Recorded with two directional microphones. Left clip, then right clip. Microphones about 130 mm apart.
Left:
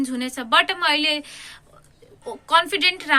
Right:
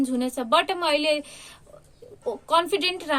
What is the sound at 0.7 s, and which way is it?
Speech, 35° left (ahead or behind).